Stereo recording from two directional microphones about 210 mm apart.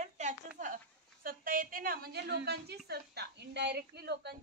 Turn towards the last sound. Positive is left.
turn(degrees=-50)  # may be behind; listen again after turning